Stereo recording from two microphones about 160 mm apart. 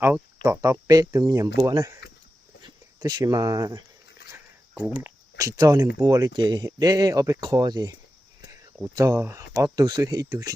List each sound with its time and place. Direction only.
0.4 s speech: 20° right (ahead or behind)
4.9 s speech: 15° right (ahead or behind)